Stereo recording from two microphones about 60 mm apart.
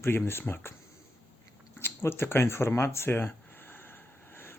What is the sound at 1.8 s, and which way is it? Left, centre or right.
Speech, left.